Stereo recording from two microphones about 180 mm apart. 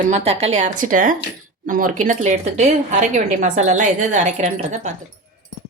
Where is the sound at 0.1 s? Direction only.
35° right (ahead or behind).